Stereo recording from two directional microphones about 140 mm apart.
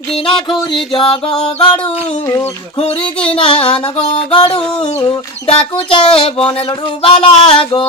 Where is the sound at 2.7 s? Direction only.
40° left (ahead or behind).